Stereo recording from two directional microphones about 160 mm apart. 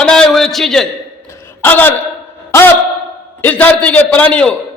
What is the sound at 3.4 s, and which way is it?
A man's voice, 10° left (ahead or behind).